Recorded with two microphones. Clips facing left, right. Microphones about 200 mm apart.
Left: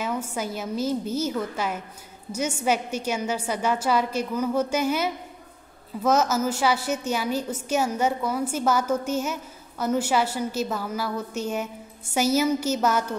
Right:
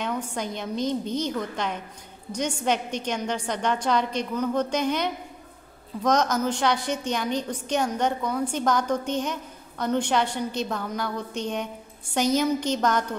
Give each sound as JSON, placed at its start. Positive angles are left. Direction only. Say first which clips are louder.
{"t": 0.0, "sound": "a woman's voice", "louder": "left 1 dB", "side_deg": 5}